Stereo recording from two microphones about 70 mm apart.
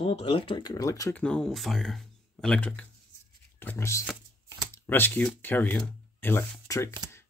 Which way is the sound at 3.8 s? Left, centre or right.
Left.